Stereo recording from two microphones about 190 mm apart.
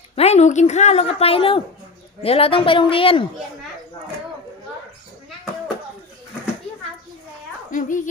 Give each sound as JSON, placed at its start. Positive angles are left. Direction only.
{"t": 0.2, "sound": "a woman's voice", "side_deg": 35}
{"t": 7.7, "sound": "a woman's voice", "side_deg": 45}